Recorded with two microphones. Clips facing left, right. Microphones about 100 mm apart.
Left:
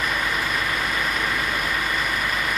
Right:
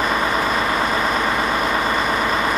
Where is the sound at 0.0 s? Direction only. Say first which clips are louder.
Right 6 dB; 35° right (ahead or behind).